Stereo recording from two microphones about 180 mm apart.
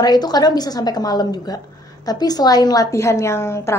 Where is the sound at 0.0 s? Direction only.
20° left (ahead or behind).